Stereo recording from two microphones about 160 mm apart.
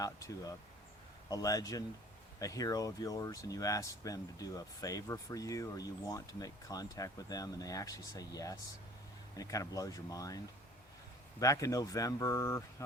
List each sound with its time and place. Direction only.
0.0 s speech: 20° left (ahead or behind)